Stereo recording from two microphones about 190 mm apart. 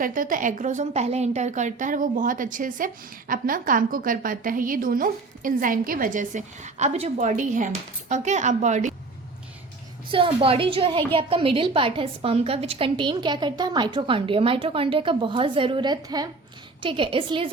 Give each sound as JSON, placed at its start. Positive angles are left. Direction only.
{"t": 0.0, "sound": "a woman's voice", "side_deg": -45}
{"t": 10.1, "sound": "a woman's voice", "side_deg": -30}